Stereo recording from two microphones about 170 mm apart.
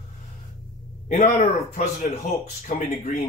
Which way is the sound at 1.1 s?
50° left (ahead or behind).